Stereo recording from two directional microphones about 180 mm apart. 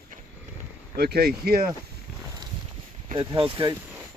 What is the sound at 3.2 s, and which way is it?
Speech, 30° right (ahead or behind).